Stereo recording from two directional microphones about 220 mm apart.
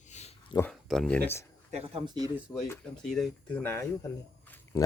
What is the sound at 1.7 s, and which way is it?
Speech, 30° right (ahead or behind).